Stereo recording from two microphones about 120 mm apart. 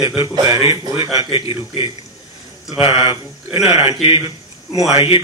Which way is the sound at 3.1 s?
50° left (ahead or behind).